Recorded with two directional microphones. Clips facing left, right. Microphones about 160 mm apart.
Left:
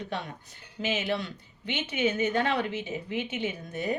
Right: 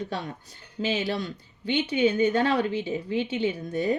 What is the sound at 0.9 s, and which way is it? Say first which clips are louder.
Speech: right 1 dB; 35° right (ahead or behind).